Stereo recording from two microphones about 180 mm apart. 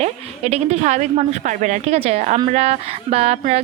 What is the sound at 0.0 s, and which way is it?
Speech, 35° right (ahead or behind).